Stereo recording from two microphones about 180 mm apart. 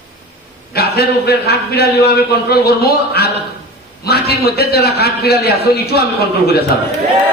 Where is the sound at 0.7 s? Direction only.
60° left (ahead or behind).